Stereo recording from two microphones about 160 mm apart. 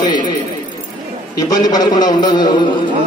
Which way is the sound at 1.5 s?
25° left (ahead or behind).